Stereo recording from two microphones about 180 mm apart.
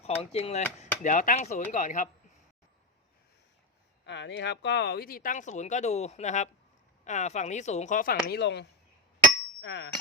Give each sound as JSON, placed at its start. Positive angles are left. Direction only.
{"t": 0.0, "sound": "speech", "side_deg": 35}
{"t": 4.0, "sound": "speech", "side_deg": 80}
{"t": 9.6, "sound": "speech", "side_deg": 90}